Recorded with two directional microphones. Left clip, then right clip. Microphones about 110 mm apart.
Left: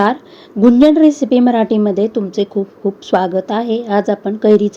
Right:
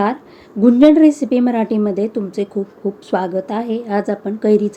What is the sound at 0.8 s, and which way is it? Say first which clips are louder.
A woman's voice: right 1 dB; 30° left (ahead or behind).